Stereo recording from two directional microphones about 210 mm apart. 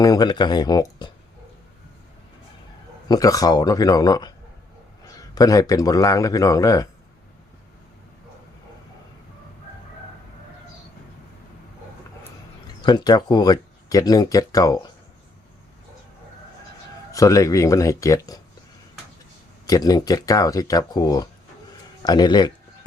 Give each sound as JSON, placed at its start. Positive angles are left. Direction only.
{"t": 0.0, "sound": "speech", "side_deg": 20}
{"t": 3.1, "sound": "speech", "side_deg": 15}
{"t": 12.8, "sound": "speech", "side_deg": 20}
{"t": 17.1, "sound": "speech", "side_deg": 15}
{"t": 19.6, "sound": "speech", "side_deg": 15}
{"t": 22.0, "sound": "a sound", "side_deg": 20}